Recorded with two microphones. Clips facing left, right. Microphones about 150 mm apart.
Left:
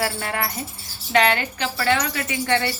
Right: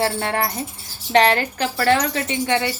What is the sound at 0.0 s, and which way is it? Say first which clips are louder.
Speech: right 4 dB; 30° right (ahead or behind).